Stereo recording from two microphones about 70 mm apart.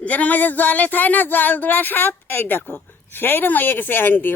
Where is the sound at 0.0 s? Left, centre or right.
Left.